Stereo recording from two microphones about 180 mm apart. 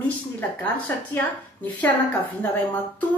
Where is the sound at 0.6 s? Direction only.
10° left (ahead or behind).